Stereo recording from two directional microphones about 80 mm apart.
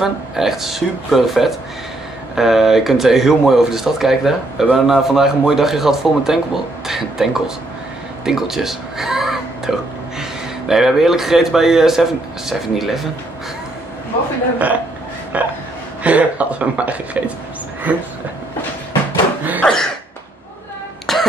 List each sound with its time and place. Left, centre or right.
0.0 s a man's voice: centre
15.3 s hiccup: right
16.0 s speech: centre
17.9 s hiccup: right
19.6 s gasp: centre
21.1 s cough: centre